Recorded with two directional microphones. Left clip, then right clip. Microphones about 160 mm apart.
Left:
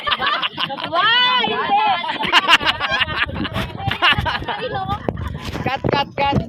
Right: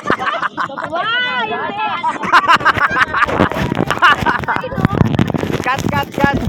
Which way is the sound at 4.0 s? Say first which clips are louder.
Right 5 dB; 50° left (ahead or behind).